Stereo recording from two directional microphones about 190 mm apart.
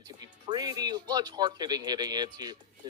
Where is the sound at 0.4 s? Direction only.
20° right (ahead or behind).